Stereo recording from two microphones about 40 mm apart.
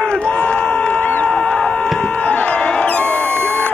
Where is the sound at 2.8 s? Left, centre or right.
Left.